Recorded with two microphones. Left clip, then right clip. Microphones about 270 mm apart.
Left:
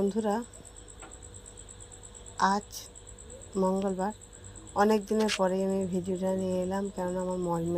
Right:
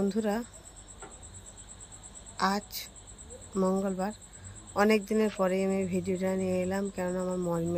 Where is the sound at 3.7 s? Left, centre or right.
Centre.